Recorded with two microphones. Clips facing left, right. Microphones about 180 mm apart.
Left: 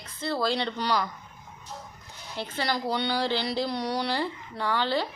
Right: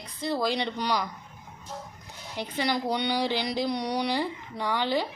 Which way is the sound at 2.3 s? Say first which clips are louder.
Right 1 dB; 15° right (ahead or behind).